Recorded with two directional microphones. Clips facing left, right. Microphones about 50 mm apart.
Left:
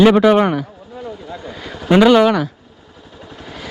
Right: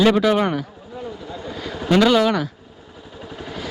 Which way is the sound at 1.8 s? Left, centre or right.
Centre.